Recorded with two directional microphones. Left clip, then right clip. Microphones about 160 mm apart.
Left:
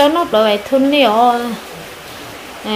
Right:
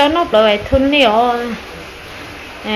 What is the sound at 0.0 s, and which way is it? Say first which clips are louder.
Speech: right 1 dB; 15° left (ahead or behind).